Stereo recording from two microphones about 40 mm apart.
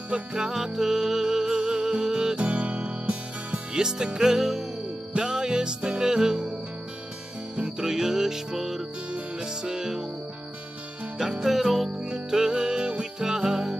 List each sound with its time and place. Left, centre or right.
0.1 s music: right
2.3 s music: right
7.5 s music: centre
11.1 s music: centre
12.0 s music: centre